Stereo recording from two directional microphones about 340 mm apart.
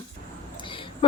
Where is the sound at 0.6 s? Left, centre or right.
Centre.